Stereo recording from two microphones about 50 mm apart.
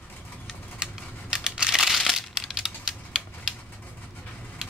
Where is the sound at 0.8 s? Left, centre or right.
Centre.